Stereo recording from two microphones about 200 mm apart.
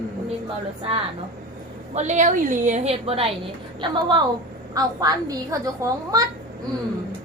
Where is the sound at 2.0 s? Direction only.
35° right (ahead or behind).